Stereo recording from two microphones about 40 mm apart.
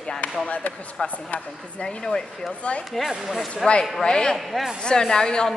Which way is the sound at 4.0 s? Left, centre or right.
Centre.